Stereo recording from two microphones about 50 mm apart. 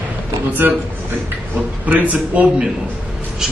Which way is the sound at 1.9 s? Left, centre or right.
Right.